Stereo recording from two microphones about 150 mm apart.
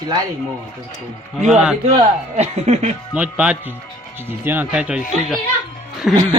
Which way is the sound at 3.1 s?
10° right (ahead or behind).